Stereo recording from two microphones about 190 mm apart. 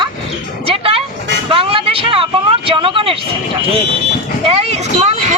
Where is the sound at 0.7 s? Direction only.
30° right (ahead or behind).